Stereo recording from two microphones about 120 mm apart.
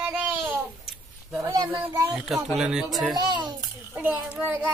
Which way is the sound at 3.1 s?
35° right (ahead or behind).